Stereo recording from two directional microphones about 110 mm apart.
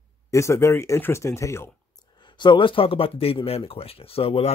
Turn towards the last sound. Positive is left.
turn(degrees=60)  # may be behind; listen again after turning